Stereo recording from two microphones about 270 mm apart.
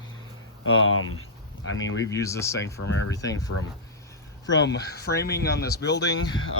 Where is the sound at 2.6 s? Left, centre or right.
Left.